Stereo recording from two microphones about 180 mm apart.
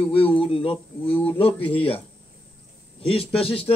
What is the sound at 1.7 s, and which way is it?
Speech, 30° left (ahead or behind).